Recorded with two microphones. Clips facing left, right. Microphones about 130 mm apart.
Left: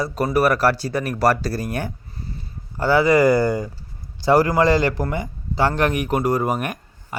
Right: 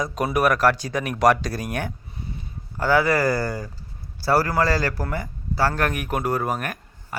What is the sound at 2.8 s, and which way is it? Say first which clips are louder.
Speech: left 4 dB; 10° left (ahead or behind).